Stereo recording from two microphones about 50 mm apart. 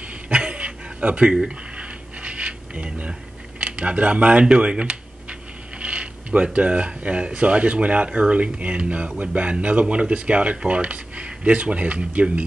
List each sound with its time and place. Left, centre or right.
0.3 s a sound: right
5.8 s mechanisms: right
7.0 s speech: right